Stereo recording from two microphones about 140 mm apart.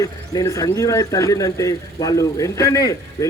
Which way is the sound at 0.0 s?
25° left (ahead or behind).